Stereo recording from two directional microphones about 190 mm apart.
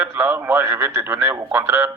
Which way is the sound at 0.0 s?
10° right (ahead or behind).